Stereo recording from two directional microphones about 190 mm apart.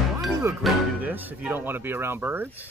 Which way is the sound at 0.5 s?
15° right (ahead or behind).